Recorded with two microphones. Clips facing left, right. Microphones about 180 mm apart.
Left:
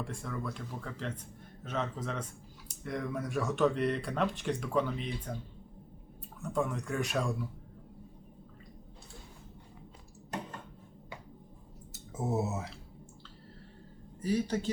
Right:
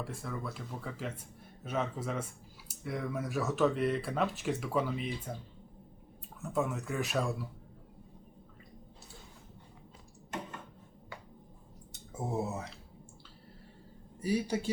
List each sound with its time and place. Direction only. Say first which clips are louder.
0.0 s speech: left 1 dB; 5° right (ahead or behind)
6.4 s speech: even; 5° right (ahead or behind)
12.4 s speech: left 1 dB; 5° left (ahead or behind)
14.2 s speech: left 1 dB; 10° right (ahead or behind)